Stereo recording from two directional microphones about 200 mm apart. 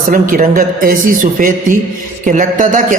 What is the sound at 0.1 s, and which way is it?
A man's voice, 45° right (ahead or behind).